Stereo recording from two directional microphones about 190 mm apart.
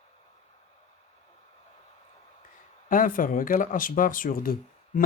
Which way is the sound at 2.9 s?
45° left (ahead or behind).